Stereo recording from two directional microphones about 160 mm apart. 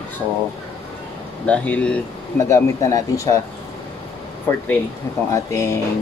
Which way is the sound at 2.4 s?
20° left (ahead or behind).